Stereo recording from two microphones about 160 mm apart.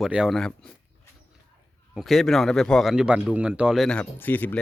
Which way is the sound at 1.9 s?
Centre (ahead or behind).